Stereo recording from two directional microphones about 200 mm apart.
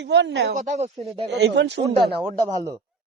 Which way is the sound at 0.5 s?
35° right (ahead or behind).